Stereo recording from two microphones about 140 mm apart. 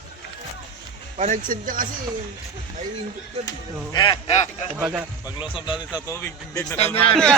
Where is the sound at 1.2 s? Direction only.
60° right (ahead or behind); by 1.8 s 80° right.